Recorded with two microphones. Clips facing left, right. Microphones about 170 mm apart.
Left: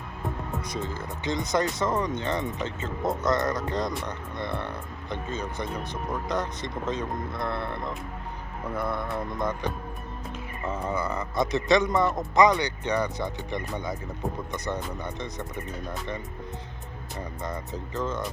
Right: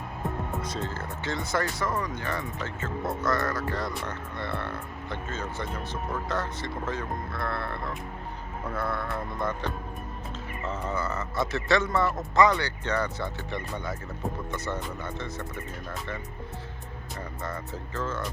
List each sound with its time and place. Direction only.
0.6 s speech: 15° left (ahead or behind)
17.4 s speech: 15° left (ahead or behind)